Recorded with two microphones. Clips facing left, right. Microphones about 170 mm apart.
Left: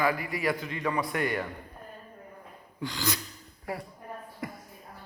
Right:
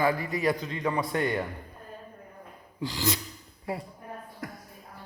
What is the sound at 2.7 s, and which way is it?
A man's voice, 25° right (ahead or behind).